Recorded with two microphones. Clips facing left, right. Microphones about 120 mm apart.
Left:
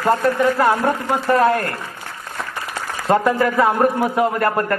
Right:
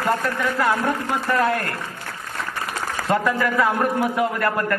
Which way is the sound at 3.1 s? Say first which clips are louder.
Left 5 dB; 35° left (ahead or behind).